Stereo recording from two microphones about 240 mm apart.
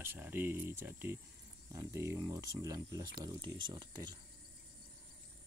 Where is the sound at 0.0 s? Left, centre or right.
Centre.